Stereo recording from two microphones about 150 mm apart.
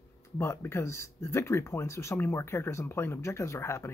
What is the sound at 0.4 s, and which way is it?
Speech, 15° left (ahead or behind).